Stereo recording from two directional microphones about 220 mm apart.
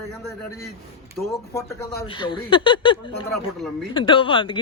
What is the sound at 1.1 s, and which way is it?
Speech, centre (ahead or behind).